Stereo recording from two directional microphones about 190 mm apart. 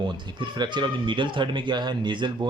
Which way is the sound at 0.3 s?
25° right (ahead or behind).